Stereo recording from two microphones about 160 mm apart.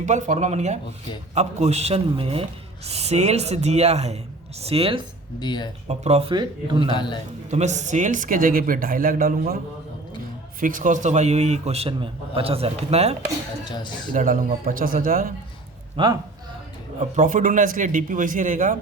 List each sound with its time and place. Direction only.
0.0 s a man's voice: 50° right (ahead or behind)
5.4 s speech: 25° left (ahead or behind)
5.9 s speech: 40° right (ahead or behind)
6.3 s a man's voice: 30° right (ahead or behind)
6.9 s speech: 30° left (ahead or behind)
7.5 s speech: 45° right (ahead or behind)
10.6 s a man's voice: 55° right (ahead or behind)
13.7 s speech: 30° left (ahead or behind)
14.1 s speech: 55° right (ahead or behind)
16.0 s speech: 35° right (ahead or behind)
17.0 s speech: 50° right (ahead or behind)